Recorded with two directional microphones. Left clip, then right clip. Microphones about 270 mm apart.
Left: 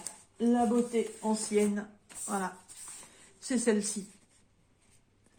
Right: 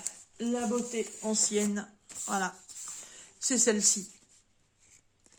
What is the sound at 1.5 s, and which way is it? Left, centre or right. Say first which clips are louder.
Speech: left 2 dB; right.